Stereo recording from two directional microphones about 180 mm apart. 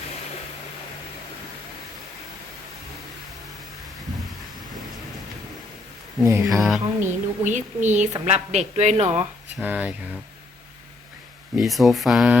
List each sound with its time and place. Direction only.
6.2 s speech: 15° right (ahead or behind)
6.6 s speech: centre (ahead or behind)
7.0 s a man's voice: 45° right (ahead or behind)
9.6 s speech: 10° right (ahead or behind)
11.5 s speech: centre (ahead or behind)